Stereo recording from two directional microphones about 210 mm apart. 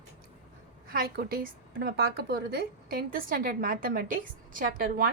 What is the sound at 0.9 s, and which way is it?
A woman's voice, 45° right (ahead or behind).